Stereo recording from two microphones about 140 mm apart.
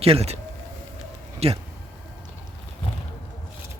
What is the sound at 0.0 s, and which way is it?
Speech, 45° right (ahead or behind).